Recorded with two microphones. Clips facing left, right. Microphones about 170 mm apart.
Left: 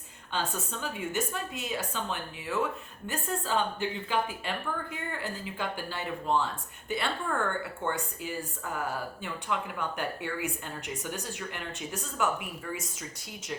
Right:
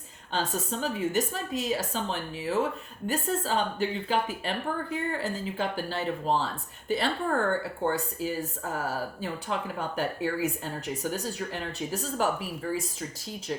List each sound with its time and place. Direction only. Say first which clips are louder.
0.3 s speech: right 4 dB; 40° right (ahead or behind)